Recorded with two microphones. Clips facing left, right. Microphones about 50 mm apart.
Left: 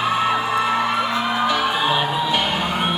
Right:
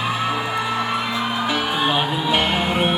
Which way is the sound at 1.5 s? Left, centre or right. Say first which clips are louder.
Left 1 dB; right.